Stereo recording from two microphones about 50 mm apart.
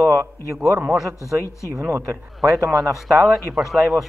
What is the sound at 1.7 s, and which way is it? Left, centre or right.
Speech, right.